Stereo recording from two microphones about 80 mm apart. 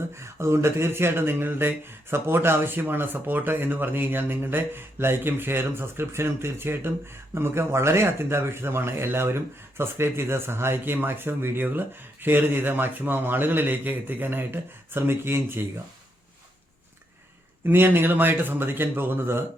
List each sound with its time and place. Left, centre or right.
0.1 s speech: right
17.7 s speech: right